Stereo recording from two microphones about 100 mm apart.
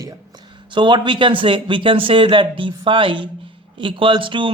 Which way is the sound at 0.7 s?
50° right (ahead or behind).